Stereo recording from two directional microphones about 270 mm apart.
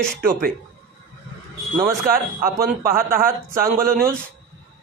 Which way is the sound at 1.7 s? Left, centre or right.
Centre.